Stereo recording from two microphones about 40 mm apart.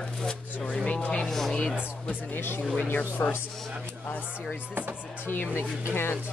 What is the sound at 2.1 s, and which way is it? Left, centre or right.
Speech, left.